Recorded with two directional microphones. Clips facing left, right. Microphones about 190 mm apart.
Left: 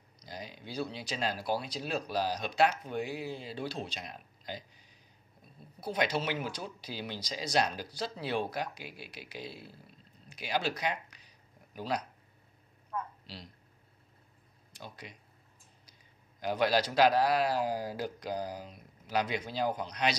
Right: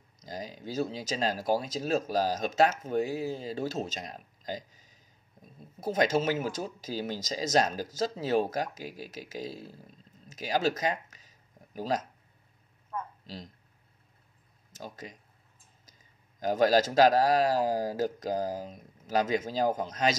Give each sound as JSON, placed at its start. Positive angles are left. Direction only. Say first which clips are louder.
{"t": 0.2, "sound": "speech", "louder": "right 5 dB", "side_deg": -40}
{"t": 13.3, "sound": "speech", "louder": "right 5 dB", "side_deg": -45}
{"t": 14.7, "sound": "speech", "louder": "right 5 dB", "side_deg": -40}
{"t": 16.3, "sound": "speech", "louder": "right 5 dB", "side_deg": -40}